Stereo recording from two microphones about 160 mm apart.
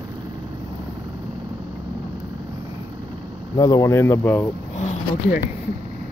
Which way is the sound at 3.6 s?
20° left (ahead or behind).